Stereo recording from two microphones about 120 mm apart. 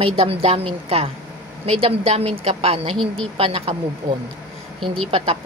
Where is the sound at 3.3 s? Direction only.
55° right (ahead or behind).